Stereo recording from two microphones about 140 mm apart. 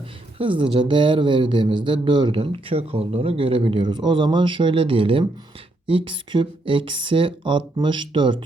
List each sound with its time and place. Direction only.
0.3 s speech: 40° right (ahead or behind)